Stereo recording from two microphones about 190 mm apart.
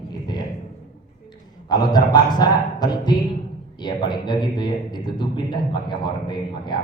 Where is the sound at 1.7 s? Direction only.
20° left (ahead or behind).